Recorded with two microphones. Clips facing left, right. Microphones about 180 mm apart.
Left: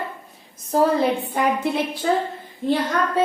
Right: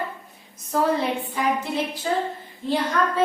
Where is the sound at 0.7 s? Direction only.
35° left (ahead or behind).